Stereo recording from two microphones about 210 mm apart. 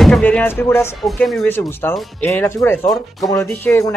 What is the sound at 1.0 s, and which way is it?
Speech, centre (ahead or behind).